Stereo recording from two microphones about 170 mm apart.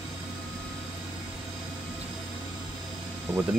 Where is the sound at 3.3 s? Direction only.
10° right (ahead or behind).